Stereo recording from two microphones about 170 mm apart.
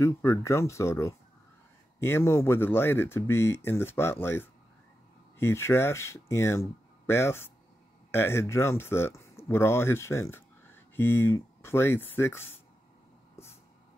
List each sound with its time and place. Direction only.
0.0 s speech: 15° left (ahead or behind)